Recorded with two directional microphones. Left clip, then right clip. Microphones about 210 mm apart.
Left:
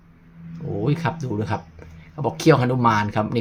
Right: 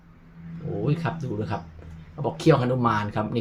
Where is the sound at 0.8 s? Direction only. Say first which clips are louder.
Left 4 dB; 35° left (ahead or behind).